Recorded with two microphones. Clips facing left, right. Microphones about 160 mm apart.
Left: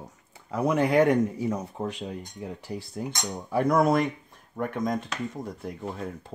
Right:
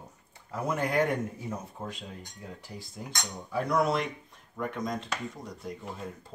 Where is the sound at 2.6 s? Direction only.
60° left (ahead or behind).